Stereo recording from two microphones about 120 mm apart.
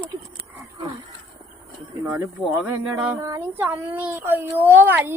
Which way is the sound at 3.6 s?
15° right (ahead or behind).